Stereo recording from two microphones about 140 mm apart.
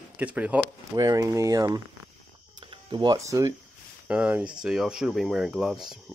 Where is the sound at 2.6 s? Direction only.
35° right (ahead or behind).